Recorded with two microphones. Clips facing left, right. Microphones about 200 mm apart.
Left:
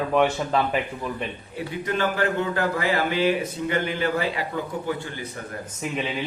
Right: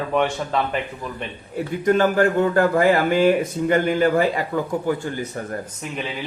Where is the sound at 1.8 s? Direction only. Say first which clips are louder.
Right 8 dB; 45° right (ahead or behind).